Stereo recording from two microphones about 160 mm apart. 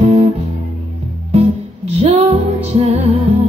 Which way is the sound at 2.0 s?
40° right (ahead or behind).